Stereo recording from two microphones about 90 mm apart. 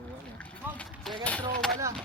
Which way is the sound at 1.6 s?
10° left (ahead or behind).